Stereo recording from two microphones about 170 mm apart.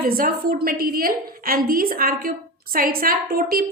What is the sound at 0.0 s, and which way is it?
A woman's voice, 60° right (ahead or behind).